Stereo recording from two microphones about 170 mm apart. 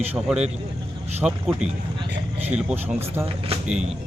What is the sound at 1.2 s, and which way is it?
Speech, 5° right (ahead or behind).